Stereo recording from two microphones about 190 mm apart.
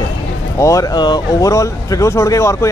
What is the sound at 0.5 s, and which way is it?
Speech, 15° left (ahead or behind).